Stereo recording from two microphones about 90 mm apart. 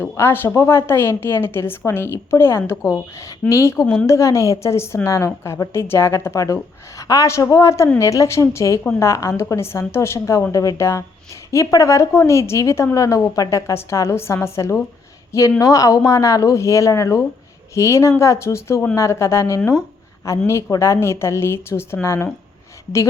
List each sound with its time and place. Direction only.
0.0 s a woman's voice: 25° left (ahead or behind)